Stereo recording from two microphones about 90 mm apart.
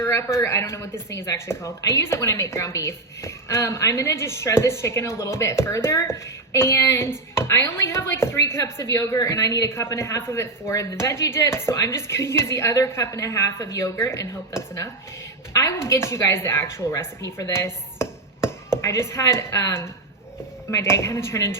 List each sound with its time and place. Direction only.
0.0 s speech: 30° left (ahead or behind)
17.5 s chopping: 30° left (ahead or behind)
20.7 s speech: 35° left (ahead or behind)